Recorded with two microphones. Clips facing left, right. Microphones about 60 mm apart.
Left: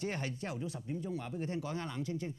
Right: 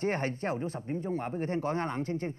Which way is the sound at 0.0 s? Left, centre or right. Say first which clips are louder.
Right 8 dB; right.